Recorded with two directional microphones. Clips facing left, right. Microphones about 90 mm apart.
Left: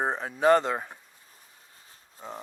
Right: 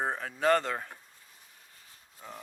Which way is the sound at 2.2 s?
25° left (ahead or behind).